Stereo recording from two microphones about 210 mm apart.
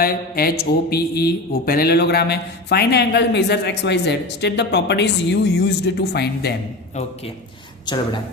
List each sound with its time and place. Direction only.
0.0 s a man's voice: 45° left (ahead or behind)